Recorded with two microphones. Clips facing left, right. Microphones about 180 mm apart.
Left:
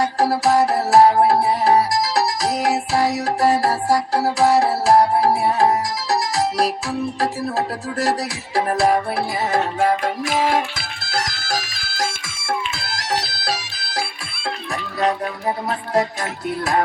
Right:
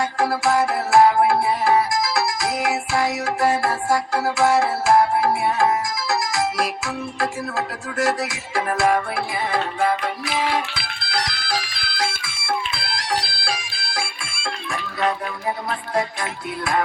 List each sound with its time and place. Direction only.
0.0 s music: 35° left (ahead or behind)